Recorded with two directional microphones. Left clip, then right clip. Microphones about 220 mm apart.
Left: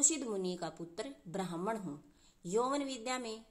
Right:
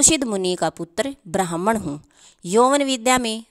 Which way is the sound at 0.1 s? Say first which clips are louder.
Right 17 dB; 55° right (ahead or behind).